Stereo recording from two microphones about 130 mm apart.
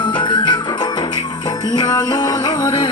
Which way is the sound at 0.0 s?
35° left (ahead or behind).